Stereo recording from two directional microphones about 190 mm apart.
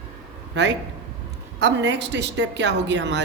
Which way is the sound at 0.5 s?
70° right (ahead or behind).